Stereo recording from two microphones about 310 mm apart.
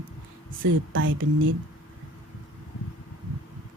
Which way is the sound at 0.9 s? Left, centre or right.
Right.